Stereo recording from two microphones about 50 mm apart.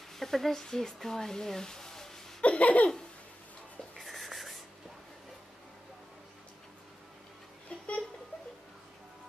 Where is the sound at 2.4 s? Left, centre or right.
Left.